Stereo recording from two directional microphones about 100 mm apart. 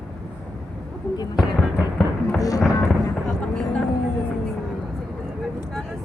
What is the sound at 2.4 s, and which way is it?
Music, 35° left (ahead or behind).